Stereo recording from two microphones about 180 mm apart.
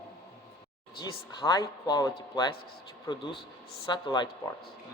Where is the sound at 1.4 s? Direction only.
25° left (ahead or behind).